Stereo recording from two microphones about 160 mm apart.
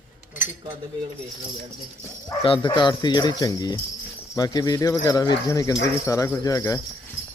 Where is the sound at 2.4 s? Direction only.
30° left (ahead or behind).